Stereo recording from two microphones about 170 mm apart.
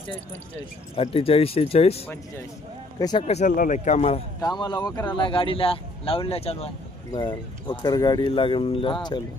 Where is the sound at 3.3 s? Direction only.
40° left (ahead or behind).